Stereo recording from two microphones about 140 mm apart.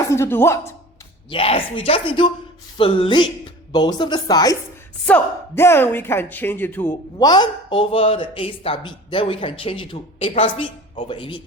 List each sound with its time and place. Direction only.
0.0 s speech: 20° left (ahead or behind)
1.3 s speech: 40° left (ahead or behind)
5.0 s speech: 15° left (ahead or behind)
7.2 s speech: 30° left (ahead or behind)